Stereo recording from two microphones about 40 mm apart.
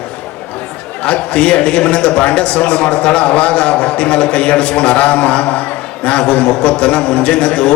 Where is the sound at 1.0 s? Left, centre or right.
Left.